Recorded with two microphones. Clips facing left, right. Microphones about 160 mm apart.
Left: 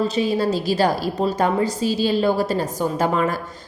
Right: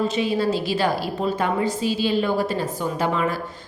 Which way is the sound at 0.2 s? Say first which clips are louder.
Left 2 dB; 40° left (ahead or behind).